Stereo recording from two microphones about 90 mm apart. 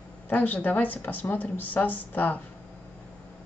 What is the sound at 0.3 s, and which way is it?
A woman's voice, 20° left (ahead or behind).